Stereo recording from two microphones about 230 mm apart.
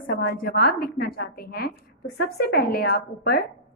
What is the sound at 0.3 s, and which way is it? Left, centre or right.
A woman's voice, left.